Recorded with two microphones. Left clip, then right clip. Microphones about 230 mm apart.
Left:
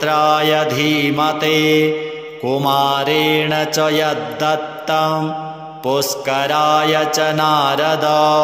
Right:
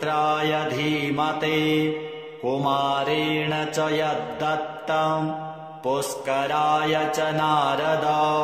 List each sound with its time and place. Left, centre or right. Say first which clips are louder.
0.0 s mantra: left 8 dB; left